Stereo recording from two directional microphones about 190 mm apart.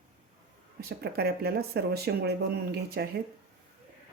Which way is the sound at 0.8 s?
55° right (ahead or behind).